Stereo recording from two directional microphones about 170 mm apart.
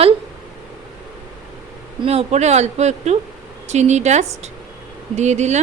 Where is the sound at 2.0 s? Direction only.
40° right (ahead or behind).